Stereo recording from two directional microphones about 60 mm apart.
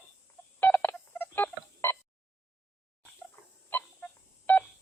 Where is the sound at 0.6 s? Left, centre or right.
Left.